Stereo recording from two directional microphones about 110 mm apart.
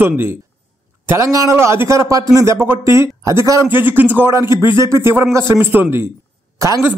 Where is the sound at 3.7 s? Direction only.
20° right (ahead or behind).